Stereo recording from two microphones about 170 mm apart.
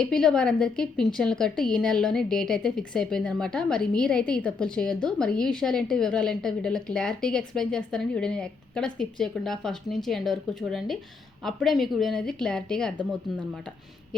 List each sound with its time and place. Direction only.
0.0 s a woman's voice: 5° left (ahead or behind)